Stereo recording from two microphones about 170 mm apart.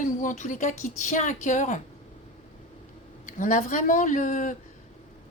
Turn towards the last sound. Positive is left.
turn(degrees=50)  # may be behind; listen again after turning